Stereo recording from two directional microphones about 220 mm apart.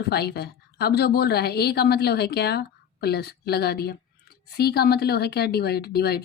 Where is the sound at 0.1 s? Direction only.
45° left (ahead or behind).